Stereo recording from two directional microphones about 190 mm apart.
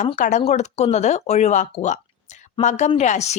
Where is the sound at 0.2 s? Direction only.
40° left (ahead or behind).